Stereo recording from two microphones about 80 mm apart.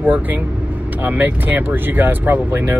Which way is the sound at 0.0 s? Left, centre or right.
Right.